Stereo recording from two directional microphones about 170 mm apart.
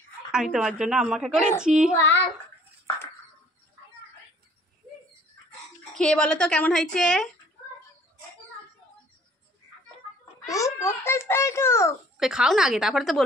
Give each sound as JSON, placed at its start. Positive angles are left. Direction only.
{"t": 0.3, "sound": "a woman's voice", "side_deg": -5}
{"t": 5.9, "sound": "a woman's voice", "side_deg": 5}
{"t": 10.5, "sound": "a child's voice", "side_deg": 20}
{"t": 12.2, "sound": "a woman's voice", "side_deg": -5}